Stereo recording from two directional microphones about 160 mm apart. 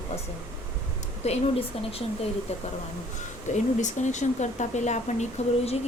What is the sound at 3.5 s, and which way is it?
Speech, 50° left (ahead or behind).